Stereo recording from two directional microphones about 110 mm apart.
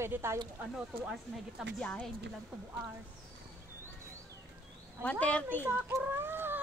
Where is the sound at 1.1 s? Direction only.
Centre (ahead or behind).